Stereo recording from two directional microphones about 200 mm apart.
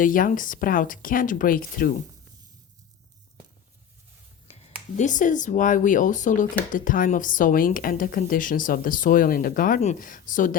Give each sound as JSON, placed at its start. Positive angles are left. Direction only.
{"t": 0.0, "sound": "speech", "side_deg": 45}
{"t": 4.5, "sound": "a sound", "side_deg": 30}
{"t": 4.9, "sound": "speech", "side_deg": 40}